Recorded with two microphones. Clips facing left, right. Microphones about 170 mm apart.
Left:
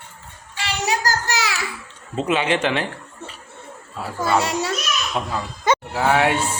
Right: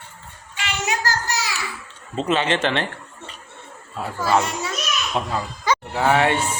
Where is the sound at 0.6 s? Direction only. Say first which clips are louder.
Left 2 dB; 35° left (ahead or behind).